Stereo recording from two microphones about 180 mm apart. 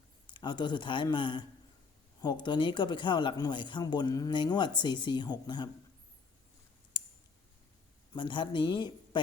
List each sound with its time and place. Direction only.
0.3 s speech: 25° left (ahead or behind)
6.9 s a sound: 25° left (ahead or behind)
8.1 s speech: 25° left (ahead or behind)